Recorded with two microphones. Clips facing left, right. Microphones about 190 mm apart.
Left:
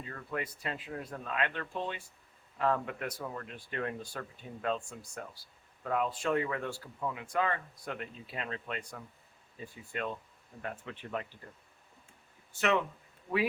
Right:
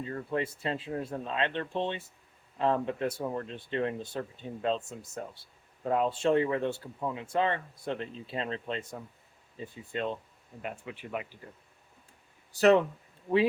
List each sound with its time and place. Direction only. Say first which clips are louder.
0.0 s speech: right 6 dB; 30° right (ahead or behind); by 11.3 s 10° right (ahead or behind)
12.5 s speech: right 8 dB; 35° right (ahead or behind)